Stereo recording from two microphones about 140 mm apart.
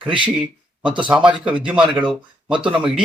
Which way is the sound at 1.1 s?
5° right (ahead or behind).